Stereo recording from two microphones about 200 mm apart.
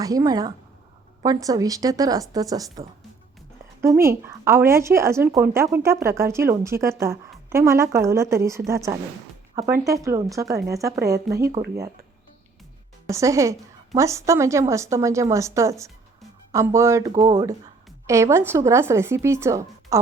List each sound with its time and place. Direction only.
0.0 s a woman's voice: 20° right (ahead or behind)
3.8 s a woman's voice: 15° right (ahead or behind)
13.1 s a woman's voice: 15° right (ahead or behind)